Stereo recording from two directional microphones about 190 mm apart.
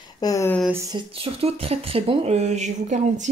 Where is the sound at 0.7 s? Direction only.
25° right (ahead or behind).